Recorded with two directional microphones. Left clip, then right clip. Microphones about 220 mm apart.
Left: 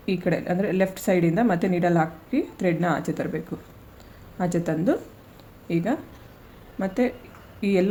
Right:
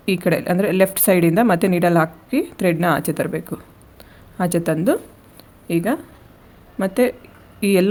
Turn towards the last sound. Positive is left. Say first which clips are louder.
# right 6 dB
turn(degrees=-40)  # may be behind; listen again after turning